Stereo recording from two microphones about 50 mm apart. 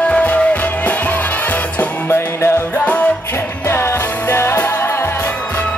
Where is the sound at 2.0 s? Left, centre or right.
Left.